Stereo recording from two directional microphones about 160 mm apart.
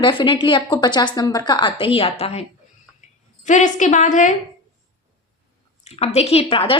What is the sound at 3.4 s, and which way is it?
Speech, 50° left (ahead or behind).